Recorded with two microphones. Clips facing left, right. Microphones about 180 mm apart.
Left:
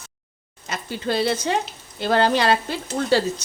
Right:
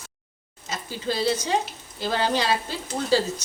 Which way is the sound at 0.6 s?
65° left (ahead or behind).